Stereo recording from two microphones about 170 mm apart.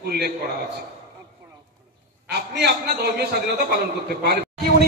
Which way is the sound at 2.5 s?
75° right (ahead or behind).